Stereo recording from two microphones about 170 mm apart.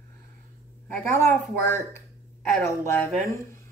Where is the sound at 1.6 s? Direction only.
15° left (ahead or behind).